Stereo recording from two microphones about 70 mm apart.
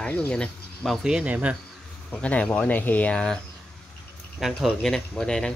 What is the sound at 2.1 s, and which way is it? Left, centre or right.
Speech, centre.